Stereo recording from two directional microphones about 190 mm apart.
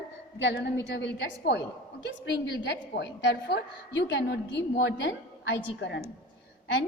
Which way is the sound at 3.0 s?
70° left (ahead or behind).